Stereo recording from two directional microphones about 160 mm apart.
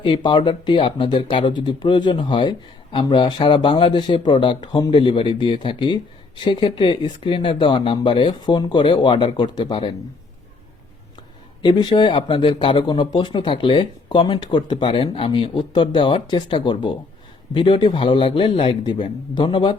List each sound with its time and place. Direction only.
0.0 s speech: 30° left (ahead or behind)
11.6 s speech: 25° left (ahead or behind)